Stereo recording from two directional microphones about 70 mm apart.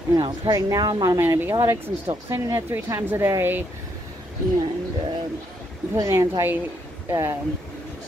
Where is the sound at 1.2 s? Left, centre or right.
Right.